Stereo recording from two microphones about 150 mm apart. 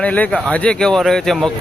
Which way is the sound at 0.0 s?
10° left (ahead or behind).